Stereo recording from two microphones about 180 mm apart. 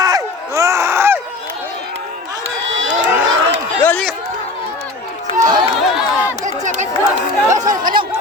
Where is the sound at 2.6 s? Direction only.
90° right.